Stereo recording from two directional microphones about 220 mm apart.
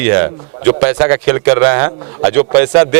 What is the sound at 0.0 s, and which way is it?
Speech, 15° right (ahead or behind).